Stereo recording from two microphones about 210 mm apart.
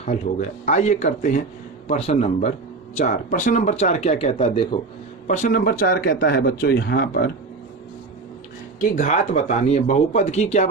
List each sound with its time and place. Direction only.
0.0 s speech: 35° left (ahead or behind)
5.3 s speech: 40° left (ahead or behind)
8.8 s speech: 35° left (ahead or behind)